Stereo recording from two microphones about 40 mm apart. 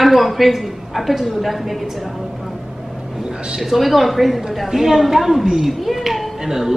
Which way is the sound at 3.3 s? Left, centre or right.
Right.